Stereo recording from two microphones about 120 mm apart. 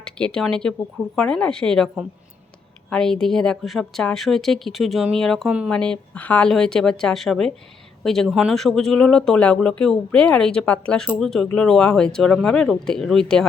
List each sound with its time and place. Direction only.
0.0 s speech: 5° left (ahead or behind)